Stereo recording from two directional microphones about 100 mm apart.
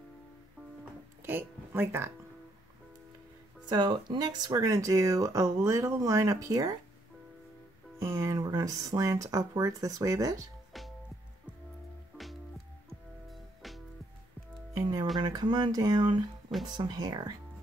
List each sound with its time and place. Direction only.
1.2 s speech: 20° right (ahead or behind)
3.6 s speech: 45° right (ahead or behind)
8.0 s speech: 25° right (ahead or behind)
13.3 s music: centre (ahead or behind)
14.7 s music: 40° right (ahead or behind)
15.1 s speech: 45° right (ahead or behind)